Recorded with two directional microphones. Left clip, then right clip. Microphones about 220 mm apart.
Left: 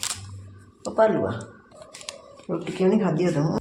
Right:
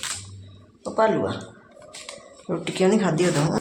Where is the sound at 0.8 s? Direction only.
5° left (ahead or behind).